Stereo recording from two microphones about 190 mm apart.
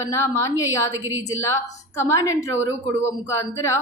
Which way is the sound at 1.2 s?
15° left (ahead or behind).